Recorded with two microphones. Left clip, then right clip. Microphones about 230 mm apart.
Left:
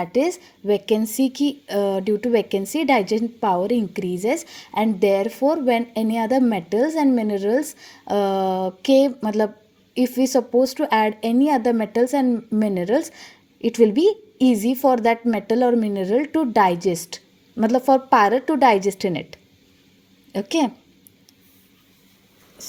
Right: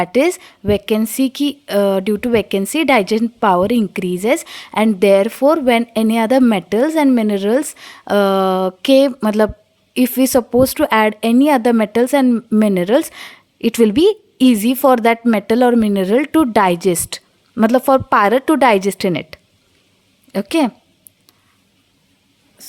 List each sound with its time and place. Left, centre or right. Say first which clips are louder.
0.0 s a woman's voice: right 6 dB; right